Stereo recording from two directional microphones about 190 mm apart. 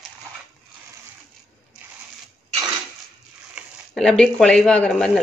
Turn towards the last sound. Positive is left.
turn(degrees=5)  # may be behind; listen again after turning